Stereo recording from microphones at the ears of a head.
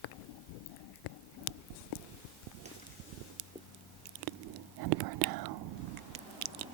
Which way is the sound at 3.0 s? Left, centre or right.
Right.